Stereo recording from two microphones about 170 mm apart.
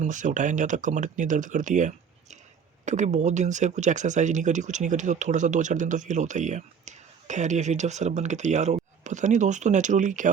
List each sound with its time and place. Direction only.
0.0 s speech: 45° right (ahead or behind)